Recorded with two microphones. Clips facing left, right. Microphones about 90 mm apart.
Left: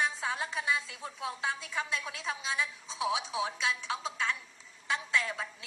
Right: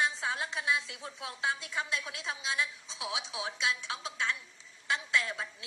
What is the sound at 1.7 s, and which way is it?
Speech, centre (ahead or behind).